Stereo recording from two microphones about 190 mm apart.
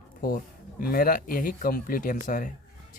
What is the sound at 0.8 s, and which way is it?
Speech, 50° left (ahead or behind).